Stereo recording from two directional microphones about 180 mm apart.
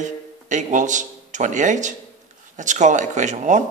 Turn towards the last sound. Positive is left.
turn(degrees=-40)  # may be behind; listen again after turning